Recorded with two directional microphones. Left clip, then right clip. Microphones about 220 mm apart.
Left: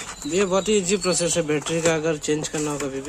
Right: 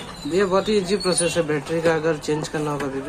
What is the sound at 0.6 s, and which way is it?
Speech, 45° left (ahead or behind).